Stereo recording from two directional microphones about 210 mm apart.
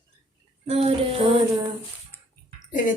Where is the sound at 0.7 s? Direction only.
30° right (ahead or behind).